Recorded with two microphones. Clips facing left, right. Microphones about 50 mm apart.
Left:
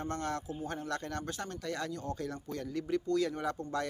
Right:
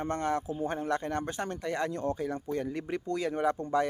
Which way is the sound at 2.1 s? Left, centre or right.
Centre.